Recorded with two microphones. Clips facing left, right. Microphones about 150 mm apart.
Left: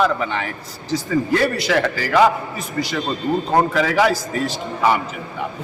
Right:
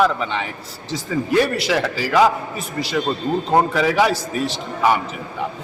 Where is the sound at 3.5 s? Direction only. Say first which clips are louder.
Right 1 dB; 10° right (ahead or behind).